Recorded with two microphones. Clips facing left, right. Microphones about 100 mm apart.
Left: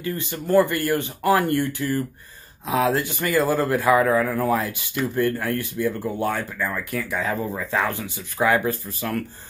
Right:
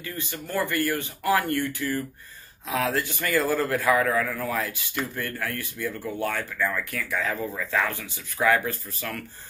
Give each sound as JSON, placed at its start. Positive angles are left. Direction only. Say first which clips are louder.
{"t": 0.0, "sound": "speech", "louder": "left 7 dB", "side_deg": 25}